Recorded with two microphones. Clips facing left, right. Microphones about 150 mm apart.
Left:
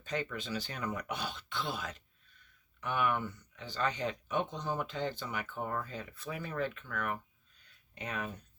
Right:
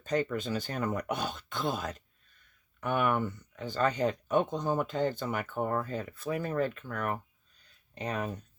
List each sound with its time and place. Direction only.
0.0 s speech: 40° right (ahead or behind)